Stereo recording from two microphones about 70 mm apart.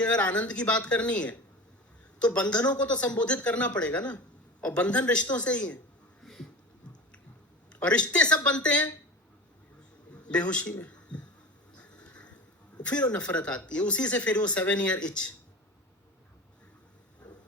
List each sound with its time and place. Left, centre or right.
0.0 s speech: centre
6.2 s a sound: centre
7.7 s speech: centre
10.2 s speech: centre
10.8 s a sound: centre
12.8 s speech: centre